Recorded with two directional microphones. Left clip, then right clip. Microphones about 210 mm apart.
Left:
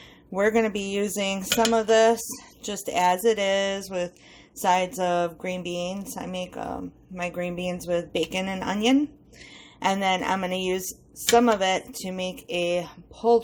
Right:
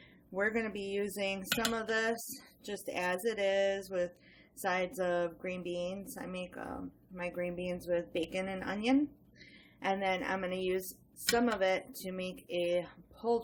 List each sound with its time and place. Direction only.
0.3 s speech: 35° left (ahead or behind)